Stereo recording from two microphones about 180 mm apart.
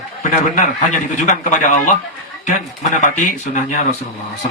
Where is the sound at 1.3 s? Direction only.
45° left (ahead or behind).